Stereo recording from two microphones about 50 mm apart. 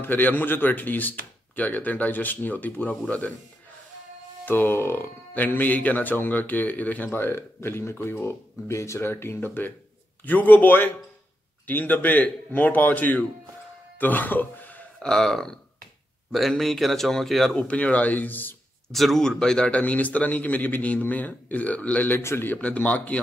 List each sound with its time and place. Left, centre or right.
0.0 s speech: left
4.5 s speech: left
7.2 s speech: left
9.1 s speech: left
13.9 s a sound: left
15.0 s speech: centre
17.6 s speech: left
18.9 s speech: centre
19.7 s speech: left
22.1 s speech: left
22.5 s speech: left